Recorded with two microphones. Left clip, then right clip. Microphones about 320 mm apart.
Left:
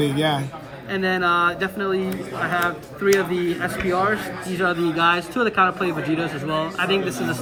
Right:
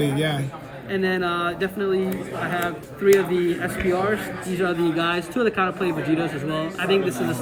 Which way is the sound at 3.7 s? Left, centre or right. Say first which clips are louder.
Even; centre.